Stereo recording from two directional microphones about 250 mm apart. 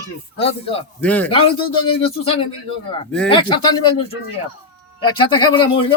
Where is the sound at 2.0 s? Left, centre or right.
Left.